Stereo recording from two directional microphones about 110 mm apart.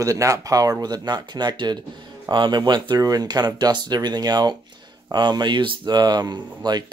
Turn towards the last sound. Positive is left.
turn(degrees=-40)  # may be behind; listen again after turning